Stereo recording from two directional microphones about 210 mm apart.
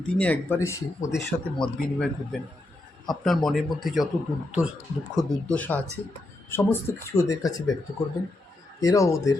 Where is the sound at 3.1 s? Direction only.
Centre (ahead or behind).